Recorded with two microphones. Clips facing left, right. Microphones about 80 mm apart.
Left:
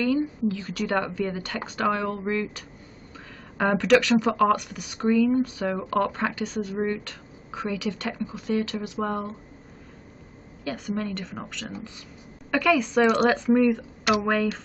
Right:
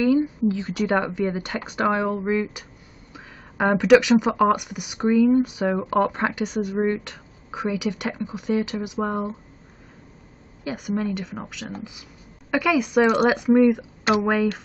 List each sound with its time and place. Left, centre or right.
0.0 s a woman's voice: centre
3.5 s speech: centre
10.9 s speech: centre